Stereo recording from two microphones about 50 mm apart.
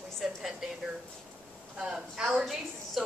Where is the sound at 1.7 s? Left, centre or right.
Centre.